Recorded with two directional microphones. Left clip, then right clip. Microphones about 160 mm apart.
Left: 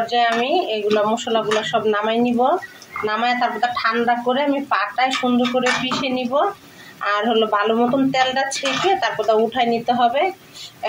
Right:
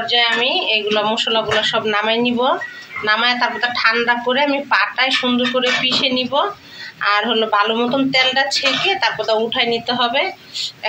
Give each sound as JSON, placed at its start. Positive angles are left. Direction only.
{"t": 0.0, "sound": "a man's voice", "side_deg": 55}